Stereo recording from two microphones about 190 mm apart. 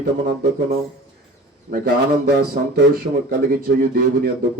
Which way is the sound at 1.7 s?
55° right (ahead or behind).